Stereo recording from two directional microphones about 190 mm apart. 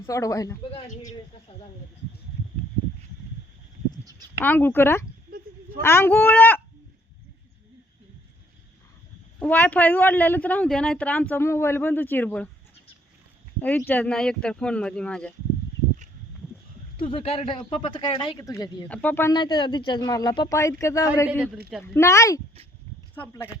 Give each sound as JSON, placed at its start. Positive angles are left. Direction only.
{"t": 0.0, "sound": "a woman's voice", "side_deg": 15}
{"t": 0.7, "sound": "a woman's voice", "side_deg": 40}
{"t": 4.4, "sound": "a woman's voice", "side_deg": 10}
{"t": 9.4, "sound": "a woman's voice", "side_deg": 10}
{"t": 13.6, "sound": "speech", "side_deg": 10}
{"t": 17.0, "sound": "a woman's voice", "side_deg": 25}
{"t": 19.3, "sound": "speech", "side_deg": 25}
{"t": 21.2, "sound": "speech", "side_deg": -5}
{"t": 21.9, "sound": "a woman's voice", "side_deg": 15}